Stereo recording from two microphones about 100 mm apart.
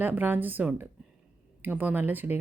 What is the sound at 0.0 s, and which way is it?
Speech, 20° right (ahead or behind).